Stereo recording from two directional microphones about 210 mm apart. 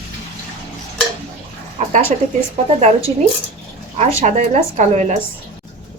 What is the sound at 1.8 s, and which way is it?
Speech, 35° right (ahead or behind).